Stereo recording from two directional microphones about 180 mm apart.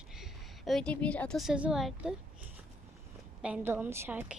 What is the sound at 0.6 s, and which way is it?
A woman's voice, centre (ahead or behind).